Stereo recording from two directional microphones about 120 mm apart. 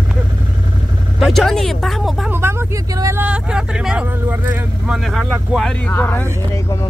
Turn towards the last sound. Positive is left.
turn(degrees=15)  # may be behind; listen again after turning